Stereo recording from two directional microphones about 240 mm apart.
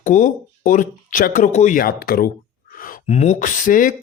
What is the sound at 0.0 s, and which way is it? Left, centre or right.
Speech, left.